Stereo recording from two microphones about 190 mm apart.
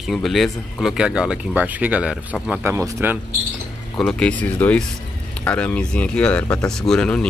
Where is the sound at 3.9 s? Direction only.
5° left (ahead or behind).